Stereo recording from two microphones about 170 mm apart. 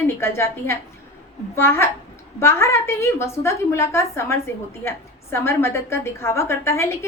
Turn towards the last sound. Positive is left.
turn(degrees=15)  # may be behind; listen again after turning